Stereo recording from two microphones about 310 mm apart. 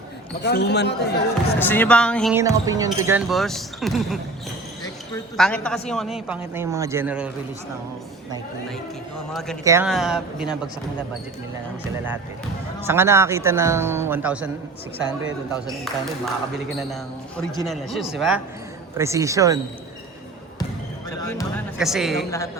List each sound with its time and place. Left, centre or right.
0.4 s speech: left
1.5 s speech: centre
2.3 s speech: centre
9.6 s speech: centre
12.8 s speech: centre
15.7 s speech: centre
21.2 s speech: centre